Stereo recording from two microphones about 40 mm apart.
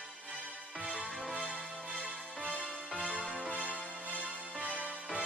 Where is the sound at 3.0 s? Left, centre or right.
Right.